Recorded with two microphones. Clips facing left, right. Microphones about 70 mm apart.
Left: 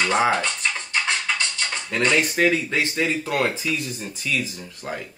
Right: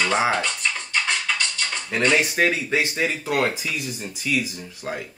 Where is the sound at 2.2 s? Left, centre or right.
Centre.